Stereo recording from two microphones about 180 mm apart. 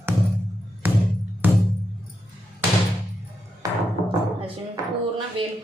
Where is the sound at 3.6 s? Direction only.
20° right (ahead or behind).